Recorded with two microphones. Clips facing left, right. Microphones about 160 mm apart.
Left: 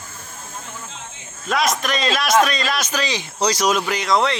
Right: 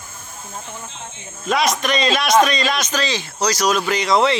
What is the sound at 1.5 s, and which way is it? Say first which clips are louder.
A man's voice: right 2 dB; centre (ahead or behind).